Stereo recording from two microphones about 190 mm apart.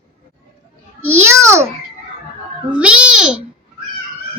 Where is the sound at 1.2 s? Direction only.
15° right (ahead or behind).